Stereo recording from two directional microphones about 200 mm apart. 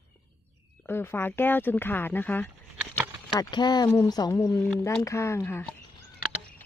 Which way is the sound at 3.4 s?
20° left (ahead or behind).